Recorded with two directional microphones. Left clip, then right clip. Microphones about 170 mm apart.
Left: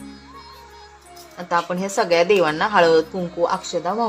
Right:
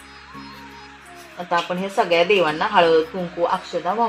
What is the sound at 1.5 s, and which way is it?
A woman's voice, 10° left (ahead or behind).